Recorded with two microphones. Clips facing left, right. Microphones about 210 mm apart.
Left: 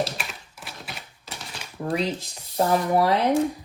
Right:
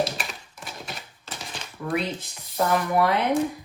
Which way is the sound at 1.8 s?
40° left (ahead or behind).